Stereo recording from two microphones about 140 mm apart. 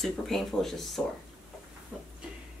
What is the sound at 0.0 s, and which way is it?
Speech, centre (ahead or behind).